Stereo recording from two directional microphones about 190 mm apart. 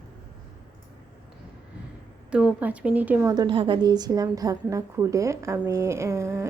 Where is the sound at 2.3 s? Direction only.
5° right (ahead or behind).